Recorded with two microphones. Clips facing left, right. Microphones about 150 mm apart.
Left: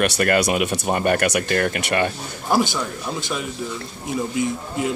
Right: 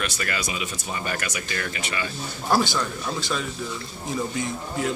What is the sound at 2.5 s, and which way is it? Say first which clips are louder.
Speech: left 2 dB; 20° left (ahead or behind).